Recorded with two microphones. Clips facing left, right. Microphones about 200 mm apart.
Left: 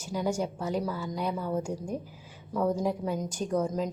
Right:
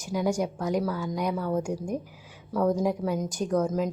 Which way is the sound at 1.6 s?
10° right (ahead or behind).